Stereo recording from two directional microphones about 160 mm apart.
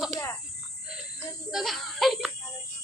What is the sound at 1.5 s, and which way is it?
Child singing, centre (ahead or behind).